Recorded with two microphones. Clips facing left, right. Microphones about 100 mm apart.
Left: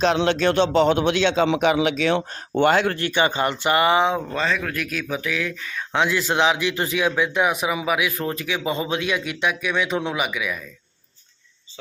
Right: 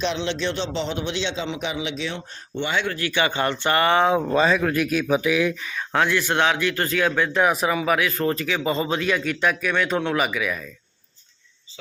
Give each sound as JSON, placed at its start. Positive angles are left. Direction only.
{"t": 0.0, "sound": "a man's voice", "side_deg": 50}
{"t": 3.1, "sound": "speech", "side_deg": 20}
{"t": 4.3, "sound": "speech", "side_deg": -15}
{"t": 6.0, "sound": "speech", "side_deg": 15}